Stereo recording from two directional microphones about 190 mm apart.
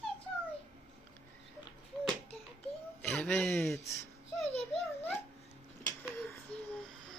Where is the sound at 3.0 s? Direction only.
5° left (ahead or behind).